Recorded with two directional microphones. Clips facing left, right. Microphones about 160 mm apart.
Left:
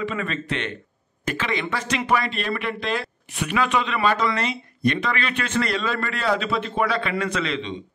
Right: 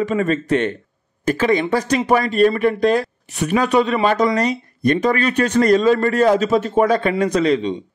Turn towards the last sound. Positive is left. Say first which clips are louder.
# right 9 dB
turn(degrees=-40)  # may be behind; listen again after turning